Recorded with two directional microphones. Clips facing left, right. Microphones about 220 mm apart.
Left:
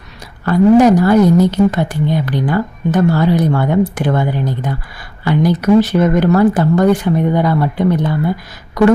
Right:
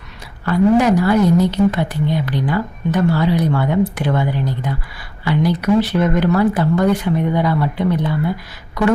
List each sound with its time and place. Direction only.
0.4 s a woman's voice: 45° left (ahead or behind)